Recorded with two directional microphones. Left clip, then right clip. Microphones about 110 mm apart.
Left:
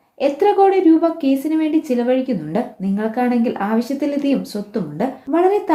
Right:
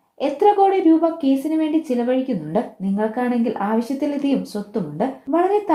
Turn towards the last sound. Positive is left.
turn(degrees=-20)  # may be behind; listen again after turning